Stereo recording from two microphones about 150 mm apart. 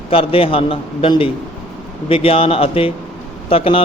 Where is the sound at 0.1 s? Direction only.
40° left (ahead or behind).